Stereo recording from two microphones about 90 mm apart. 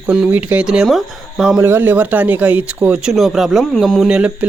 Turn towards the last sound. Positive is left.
turn(degrees=-15)  # may be behind; listen again after turning